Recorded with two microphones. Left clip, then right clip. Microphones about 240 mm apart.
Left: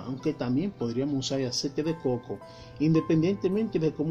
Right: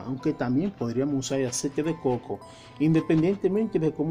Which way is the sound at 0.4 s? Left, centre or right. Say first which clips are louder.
Right 3 dB; centre.